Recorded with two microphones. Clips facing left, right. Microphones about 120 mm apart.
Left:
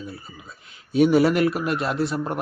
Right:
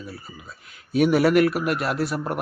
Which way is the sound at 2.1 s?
5° right (ahead or behind).